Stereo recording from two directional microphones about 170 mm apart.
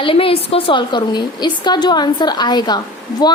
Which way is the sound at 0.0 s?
30° left (ahead or behind).